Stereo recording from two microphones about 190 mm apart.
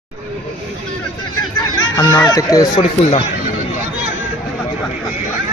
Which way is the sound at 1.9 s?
20° left (ahead or behind).